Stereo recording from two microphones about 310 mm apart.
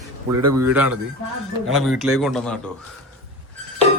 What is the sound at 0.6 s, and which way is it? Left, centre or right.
A man's voice, centre.